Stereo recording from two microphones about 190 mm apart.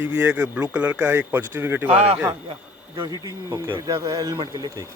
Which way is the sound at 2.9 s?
25° right (ahead or behind).